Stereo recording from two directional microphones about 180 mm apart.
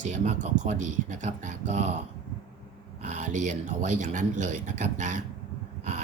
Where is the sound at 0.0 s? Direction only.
40° right (ahead or behind).